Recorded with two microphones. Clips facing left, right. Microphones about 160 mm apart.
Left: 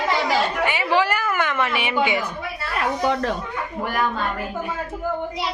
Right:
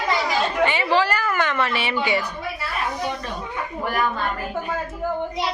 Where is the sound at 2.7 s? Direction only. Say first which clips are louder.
Left 7 dB; 90° left.